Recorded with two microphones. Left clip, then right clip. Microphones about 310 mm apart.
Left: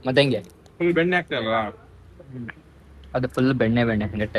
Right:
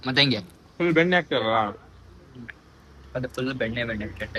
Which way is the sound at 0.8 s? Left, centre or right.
Right.